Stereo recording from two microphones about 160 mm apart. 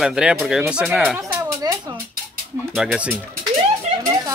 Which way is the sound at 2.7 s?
5° right (ahead or behind).